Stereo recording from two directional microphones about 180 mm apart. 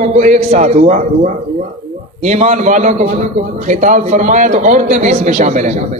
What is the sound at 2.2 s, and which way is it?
A man's voice, 40° right (ahead or behind).